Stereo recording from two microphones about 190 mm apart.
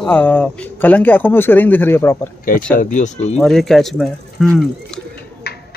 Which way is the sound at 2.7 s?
40° left (ahead or behind).